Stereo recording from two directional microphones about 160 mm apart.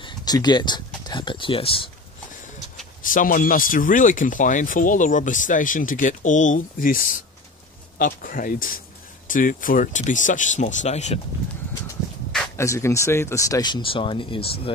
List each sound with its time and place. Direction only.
0.0 s speech: 25° left (ahead or behind)
3.0 s speech: 55° left (ahead or behind)
12.5 s speech: 15° left (ahead or behind); by 14.7 s 35° left (ahead or behind)